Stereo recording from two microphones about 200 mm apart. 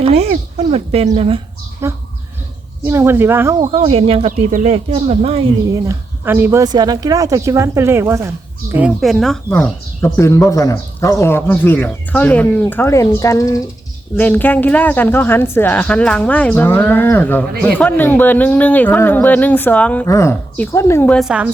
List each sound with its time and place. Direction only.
0.0 s speech: 30° right (ahead or behind)
1.8 s speech: 15° right (ahead or behind)
3.6 s speech: 30° right (ahead or behind)
5.6 s speech: 15° right (ahead or behind); by 21.2 s 10° left (ahead or behind)
21.2 s a woman's voice: 5° right (ahead or behind)